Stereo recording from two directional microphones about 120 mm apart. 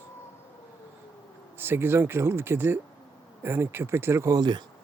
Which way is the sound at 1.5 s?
20° right (ahead or behind).